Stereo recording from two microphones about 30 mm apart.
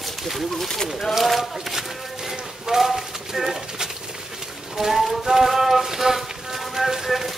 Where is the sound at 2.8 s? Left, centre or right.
Centre.